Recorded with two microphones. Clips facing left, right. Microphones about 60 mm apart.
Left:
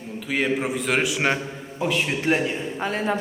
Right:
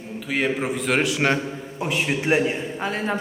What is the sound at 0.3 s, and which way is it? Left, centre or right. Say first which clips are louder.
Speech: even; centre.